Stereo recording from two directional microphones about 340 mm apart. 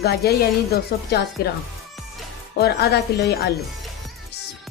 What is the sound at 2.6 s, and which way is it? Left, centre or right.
Speech, left.